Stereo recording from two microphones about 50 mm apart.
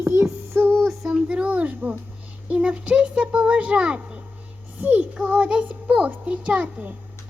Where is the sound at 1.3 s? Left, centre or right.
Right.